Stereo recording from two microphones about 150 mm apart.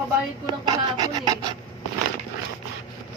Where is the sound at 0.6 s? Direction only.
25° right (ahead or behind).